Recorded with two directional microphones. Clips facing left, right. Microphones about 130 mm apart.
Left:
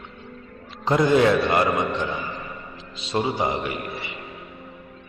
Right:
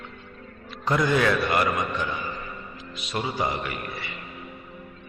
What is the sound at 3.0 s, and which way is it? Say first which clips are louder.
A man's voice: left 4 dB; 25° left (ahead or behind).